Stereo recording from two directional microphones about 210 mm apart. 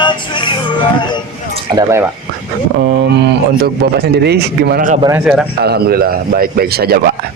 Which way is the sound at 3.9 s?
50° right (ahead or behind).